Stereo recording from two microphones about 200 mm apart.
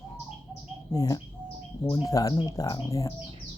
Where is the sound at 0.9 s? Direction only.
15° left (ahead or behind).